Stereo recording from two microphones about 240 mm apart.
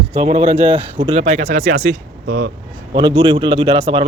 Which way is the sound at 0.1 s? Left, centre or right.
Right.